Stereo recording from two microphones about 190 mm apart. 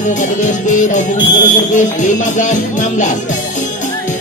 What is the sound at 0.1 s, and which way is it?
Music, 40° left (ahead or behind).